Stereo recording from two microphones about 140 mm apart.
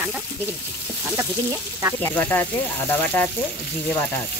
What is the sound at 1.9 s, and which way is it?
Speech, 10° left (ahead or behind).